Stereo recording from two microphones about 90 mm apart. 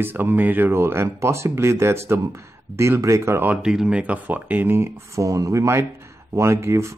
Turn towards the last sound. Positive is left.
turn(degrees=-30)  # may be behind; listen again after turning